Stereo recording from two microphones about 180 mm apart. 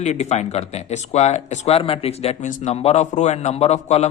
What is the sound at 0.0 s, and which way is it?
A man's voice, 40° left (ahead or behind).